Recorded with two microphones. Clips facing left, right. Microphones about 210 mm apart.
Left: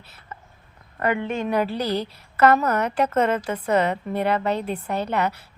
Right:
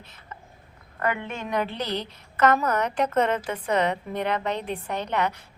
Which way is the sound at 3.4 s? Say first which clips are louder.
Left 3 dB; 40° left (ahead or behind).